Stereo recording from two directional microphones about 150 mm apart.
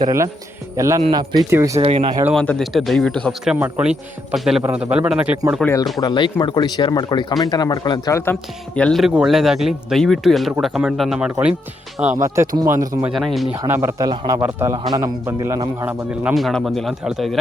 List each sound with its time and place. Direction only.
0.0 s a man's voice: 20° right (ahead or behind)
1.8 s speech: 40° right (ahead or behind)
2.3 s a man's voice: 5° left (ahead or behind)
5.6 s speech: 20° left (ahead or behind)
8.2 s a man's voice: 10° left (ahead or behind); by 11.5 s 10° right (ahead or behind)
12.2 s a man's voice: 20° right (ahead or behind)
13.1 s speech: centre (ahead or behind)
13.7 s a man's voice: 15° right (ahead or behind)
14.0 s a man's voice: 25° right (ahead or behind)
15.9 s speech: 5° right (ahead or behind)